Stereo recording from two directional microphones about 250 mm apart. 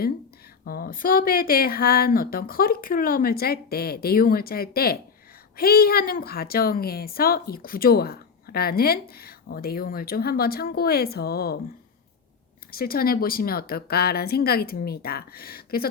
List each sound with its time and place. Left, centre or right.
0.6 s a woman's voice: left
12.7 s a woman's voice: left